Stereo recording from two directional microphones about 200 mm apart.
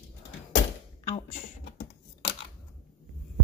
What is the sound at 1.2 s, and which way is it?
Typing, 45° left (ahead or behind).